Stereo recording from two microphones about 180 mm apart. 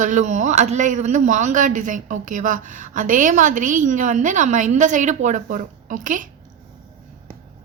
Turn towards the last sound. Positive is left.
turn(degrees=-45)  # may be behind; listen again after turning